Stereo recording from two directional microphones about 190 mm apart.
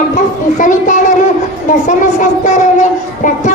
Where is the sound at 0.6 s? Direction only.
40° left (ahead or behind).